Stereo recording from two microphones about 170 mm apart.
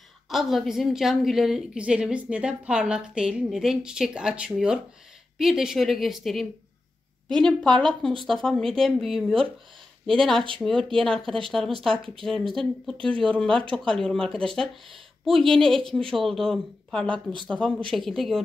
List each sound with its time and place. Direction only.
0.3 s a woman's voice: centre (ahead or behind)
8.1 s speech: 30° right (ahead or behind)
8.4 s a woman's voice: 5° left (ahead or behind)
10.6 s a woman's voice: 5° left (ahead or behind)